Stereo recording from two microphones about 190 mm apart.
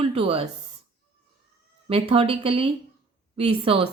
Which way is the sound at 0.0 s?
30° right (ahead or behind).